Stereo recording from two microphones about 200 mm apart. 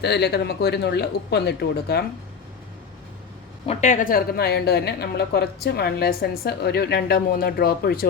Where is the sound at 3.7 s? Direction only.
35° left (ahead or behind).